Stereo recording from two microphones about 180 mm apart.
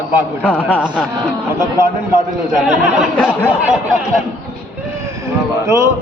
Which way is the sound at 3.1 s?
5° left (ahead or behind).